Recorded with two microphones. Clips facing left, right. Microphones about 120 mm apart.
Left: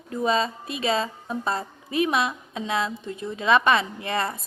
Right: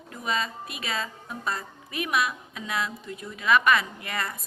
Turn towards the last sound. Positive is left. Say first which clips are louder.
# left 6 dB
turn(degrees=30)  # may be behind; listen again after turning